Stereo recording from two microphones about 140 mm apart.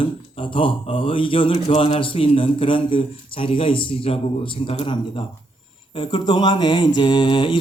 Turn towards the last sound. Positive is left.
turn(degrees=35)  # may be behind; listen again after turning